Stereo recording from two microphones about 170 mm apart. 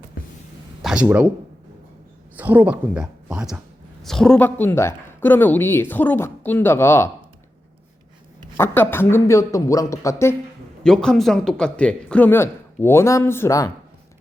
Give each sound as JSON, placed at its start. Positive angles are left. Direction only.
{"t": 0.8, "sound": "a sound", "side_deg": 0}
{"t": 1.0, "sound": "speech", "side_deg": -10}
{"t": 2.3, "sound": "speech", "side_deg": -10}
{"t": 8.5, "sound": "speech", "side_deg": 15}
{"t": 10.8, "sound": "speech", "side_deg": 5}